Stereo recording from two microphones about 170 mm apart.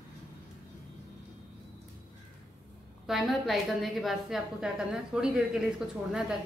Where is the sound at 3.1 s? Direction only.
Centre (ahead or behind).